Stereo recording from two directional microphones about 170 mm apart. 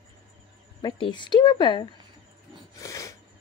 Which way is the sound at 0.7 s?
30° left (ahead or behind).